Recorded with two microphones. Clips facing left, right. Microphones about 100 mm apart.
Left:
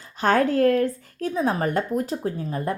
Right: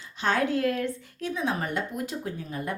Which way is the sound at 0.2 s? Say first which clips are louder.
Left 6 dB; 45° left (ahead or behind).